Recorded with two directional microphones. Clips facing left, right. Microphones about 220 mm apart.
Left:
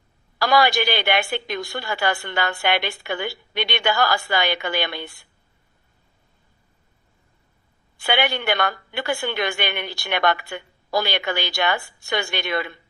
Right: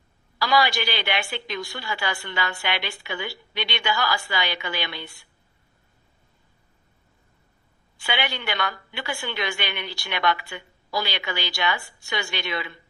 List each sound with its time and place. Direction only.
0.3 s a woman's voice: 50° left (ahead or behind)
7.9 s a woman's voice: 55° left (ahead or behind)